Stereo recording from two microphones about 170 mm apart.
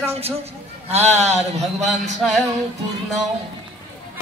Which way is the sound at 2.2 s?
Centre (ahead or behind).